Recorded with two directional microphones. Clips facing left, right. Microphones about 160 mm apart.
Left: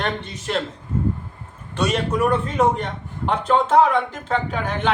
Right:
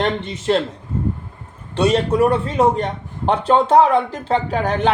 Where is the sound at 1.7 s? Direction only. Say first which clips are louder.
Right 6 dB; 30° right (ahead or behind).